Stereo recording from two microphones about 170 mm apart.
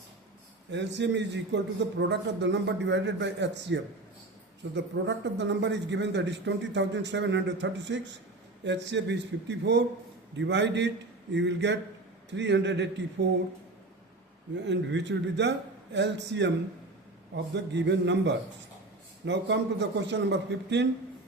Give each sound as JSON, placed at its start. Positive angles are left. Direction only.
{"t": 0.7, "sound": "speech", "side_deg": -90}
{"t": 14.5, "sound": "speech", "side_deg": -90}